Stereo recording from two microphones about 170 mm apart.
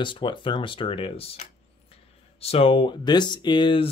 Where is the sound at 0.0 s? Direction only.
30° left (ahead or behind).